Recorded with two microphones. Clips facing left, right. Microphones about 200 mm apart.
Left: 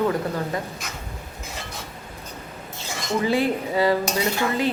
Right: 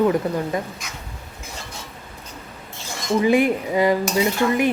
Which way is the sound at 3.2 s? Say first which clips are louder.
Right 4 dB; 15° right (ahead or behind).